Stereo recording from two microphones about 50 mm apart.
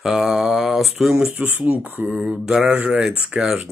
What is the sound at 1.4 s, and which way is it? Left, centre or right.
Speech, right.